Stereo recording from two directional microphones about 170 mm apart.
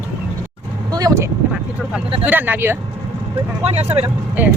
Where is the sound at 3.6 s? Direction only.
40° right (ahead or behind).